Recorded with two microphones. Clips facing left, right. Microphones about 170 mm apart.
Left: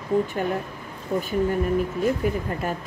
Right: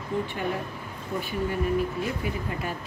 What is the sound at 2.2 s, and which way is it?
Speech, 45° left (ahead or behind).